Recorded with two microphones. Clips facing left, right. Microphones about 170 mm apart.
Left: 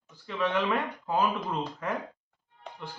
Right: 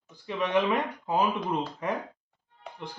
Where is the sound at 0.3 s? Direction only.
15° right (ahead or behind).